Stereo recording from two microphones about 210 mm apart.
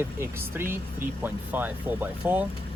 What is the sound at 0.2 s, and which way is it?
Speech, 10° right (ahead or behind).